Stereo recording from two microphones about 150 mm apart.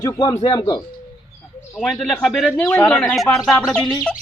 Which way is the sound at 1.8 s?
5° left (ahead or behind).